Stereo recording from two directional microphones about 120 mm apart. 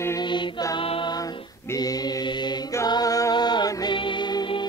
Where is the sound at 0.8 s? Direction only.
45° left (ahead or behind).